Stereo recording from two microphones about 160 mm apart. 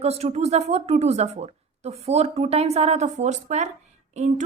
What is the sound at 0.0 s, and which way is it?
A woman's voice, 40° right (ahead or behind).